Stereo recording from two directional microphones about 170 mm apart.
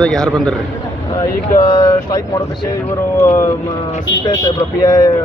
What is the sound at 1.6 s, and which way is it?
Speech, 20° left (ahead or behind).